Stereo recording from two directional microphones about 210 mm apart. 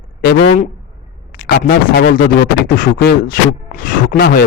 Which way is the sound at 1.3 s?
45° left (ahead or behind).